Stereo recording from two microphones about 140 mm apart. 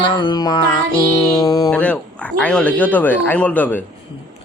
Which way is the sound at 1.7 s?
10° left (ahead or behind).